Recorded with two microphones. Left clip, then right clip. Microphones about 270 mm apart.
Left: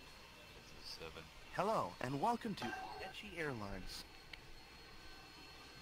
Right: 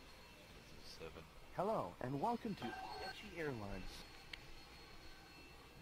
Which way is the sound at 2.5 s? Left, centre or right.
Left.